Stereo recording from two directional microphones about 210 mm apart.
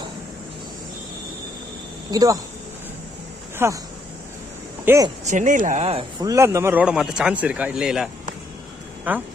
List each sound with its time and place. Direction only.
2.0 s speech: 15° right (ahead or behind)
3.5 s speech: 15° right (ahead or behind)
4.8 s speech: 15° right (ahead or behind)
5.3 s speech: 35° right (ahead or behind)
6.2 s speech: 15° right (ahead or behind)